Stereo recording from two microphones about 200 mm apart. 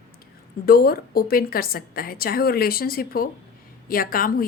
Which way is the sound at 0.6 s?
50° left (ahead or behind).